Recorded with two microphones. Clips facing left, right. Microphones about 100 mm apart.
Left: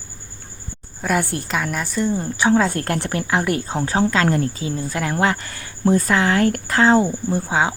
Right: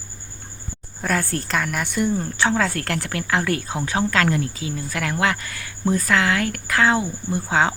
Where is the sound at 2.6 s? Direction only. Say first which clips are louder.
Left 3 dB; 25° left (ahead or behind).